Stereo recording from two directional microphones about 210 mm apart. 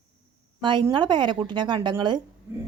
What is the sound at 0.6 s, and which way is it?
Speech, 20° right (ahead or behind).